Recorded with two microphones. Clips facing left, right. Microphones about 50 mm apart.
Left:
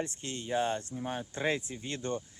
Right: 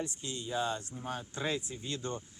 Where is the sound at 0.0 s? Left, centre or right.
Left.